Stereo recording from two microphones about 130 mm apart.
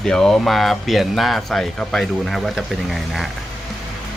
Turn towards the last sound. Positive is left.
turn(degrees=0)  # may be behind; listen again after turning